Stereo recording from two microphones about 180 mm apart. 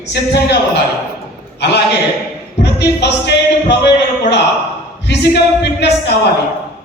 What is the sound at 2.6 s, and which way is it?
Music, 70° left (ahead or behind).